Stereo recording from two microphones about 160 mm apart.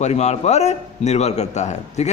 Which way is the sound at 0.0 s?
45° left (ahead or behind).